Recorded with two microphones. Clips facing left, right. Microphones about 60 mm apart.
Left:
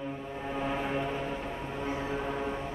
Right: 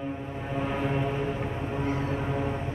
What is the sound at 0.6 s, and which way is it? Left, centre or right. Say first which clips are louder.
Vehicle: right 3 dB; centre.